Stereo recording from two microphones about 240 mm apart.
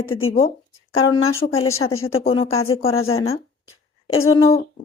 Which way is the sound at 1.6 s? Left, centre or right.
Left.